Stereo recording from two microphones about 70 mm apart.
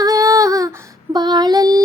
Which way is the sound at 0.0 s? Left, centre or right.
Right.